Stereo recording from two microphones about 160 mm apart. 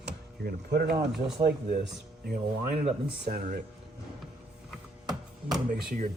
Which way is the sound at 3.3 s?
55° right (ahead or behind).